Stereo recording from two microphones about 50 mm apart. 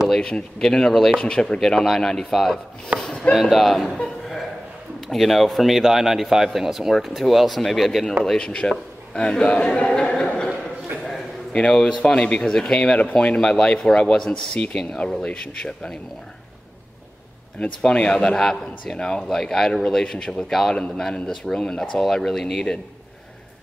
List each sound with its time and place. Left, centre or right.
0.1 s speech: centre
3.0 s a sound: centre
3.3 s speech: centre
5.0 s speech: centre
8.2 s a man's voice: centre
11.7 s speech: centre
17.6 s speech: centre
20.7 s speech: left